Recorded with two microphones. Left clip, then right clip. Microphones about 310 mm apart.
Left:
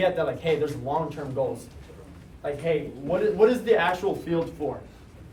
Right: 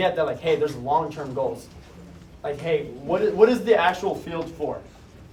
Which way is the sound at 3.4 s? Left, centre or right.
Centre.